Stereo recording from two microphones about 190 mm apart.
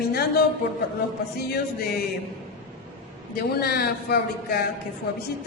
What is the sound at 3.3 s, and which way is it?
Speech, 55° left (ahead or behind).